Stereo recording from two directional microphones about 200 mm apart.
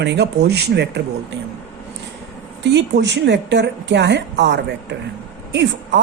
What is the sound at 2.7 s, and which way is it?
A woman's voice, 60° right (ahead or behind).